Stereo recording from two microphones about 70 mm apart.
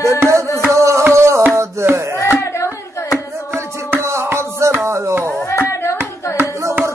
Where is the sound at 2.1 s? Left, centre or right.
Left.